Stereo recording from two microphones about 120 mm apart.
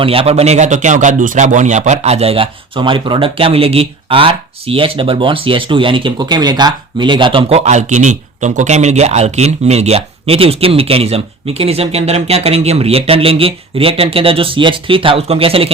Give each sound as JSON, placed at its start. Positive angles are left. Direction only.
{"t": 0.0, "sound": "speech", "side_deg": -50}
{"t": 7.6, "sound": "speech", "side_deg": -75}